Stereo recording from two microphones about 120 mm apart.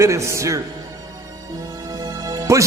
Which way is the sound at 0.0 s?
25° right (ahead or behind).